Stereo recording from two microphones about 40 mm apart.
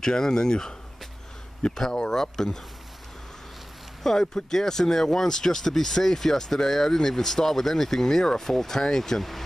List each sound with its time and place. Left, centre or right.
0.0 s speech: centre
1.8 s speech: centre
4.0 s speech: centre